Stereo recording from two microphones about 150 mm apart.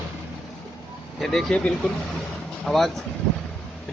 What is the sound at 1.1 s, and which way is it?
Speech, centre (ahead or behind).